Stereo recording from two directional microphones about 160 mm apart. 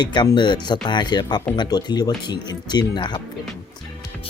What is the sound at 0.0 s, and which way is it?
Speech, 25° left (ahead or behind).